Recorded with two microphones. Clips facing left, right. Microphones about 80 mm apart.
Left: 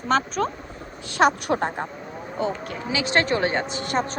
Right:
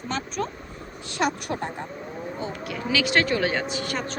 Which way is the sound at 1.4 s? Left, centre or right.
Left.